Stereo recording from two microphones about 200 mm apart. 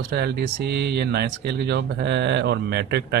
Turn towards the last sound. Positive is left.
turn(degrees=-60)  # may be behind; listen again after turning